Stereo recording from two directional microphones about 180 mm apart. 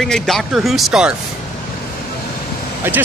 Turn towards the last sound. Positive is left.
turn(degrees=-10)  # may be behind; listen again after turning